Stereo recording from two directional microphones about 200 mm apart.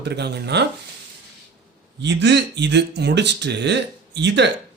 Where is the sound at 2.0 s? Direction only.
60° right (ahead or behind).